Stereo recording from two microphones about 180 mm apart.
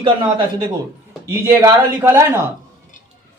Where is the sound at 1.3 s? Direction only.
15° right (ahead or behind).